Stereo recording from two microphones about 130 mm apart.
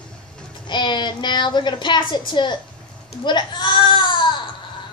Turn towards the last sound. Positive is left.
turn(degrees=40)  # may be behind; listen again after turning